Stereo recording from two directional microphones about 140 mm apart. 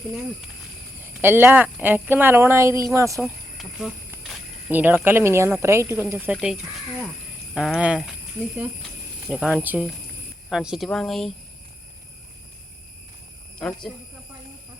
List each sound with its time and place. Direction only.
1.2 s speech: 15° right (ahead or behind)
3.6 s speech: 5° right (ahead or behind)
6.3 s speech: centre (ahead or behind)
9.2 s speech: 5° right (ahead or behind)
13.6 s speech: 5° left (ahead or behind)